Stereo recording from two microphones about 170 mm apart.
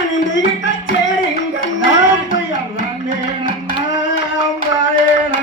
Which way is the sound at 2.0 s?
90° left.